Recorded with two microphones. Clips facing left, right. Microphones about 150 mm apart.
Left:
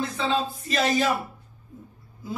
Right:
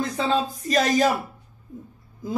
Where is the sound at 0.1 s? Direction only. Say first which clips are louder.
Right 2 dB; 40° right (ahead or behind).